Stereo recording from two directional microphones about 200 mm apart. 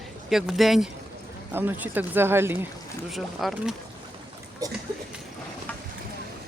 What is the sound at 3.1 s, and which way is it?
Speech, centre (ahead or behind).